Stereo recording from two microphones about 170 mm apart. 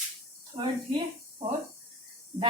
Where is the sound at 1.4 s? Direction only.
35° right (ahead or behind).